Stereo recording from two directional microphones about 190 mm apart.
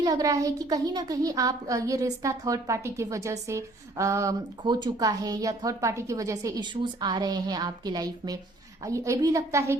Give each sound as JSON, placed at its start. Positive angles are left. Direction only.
{"t": 0.0, "sound": "a child's voice", "side_deg": -20}